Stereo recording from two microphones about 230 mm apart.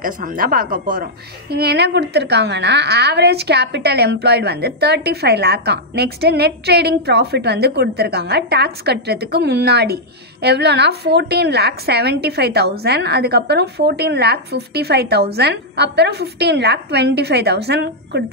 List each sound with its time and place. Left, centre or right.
0.0 s a woman's voice: right